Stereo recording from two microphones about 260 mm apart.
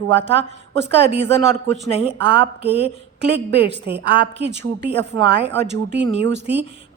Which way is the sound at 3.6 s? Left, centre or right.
Right.